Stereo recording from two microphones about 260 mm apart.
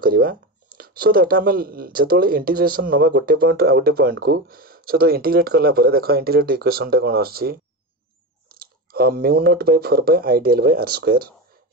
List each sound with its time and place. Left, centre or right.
0.0 s speech: right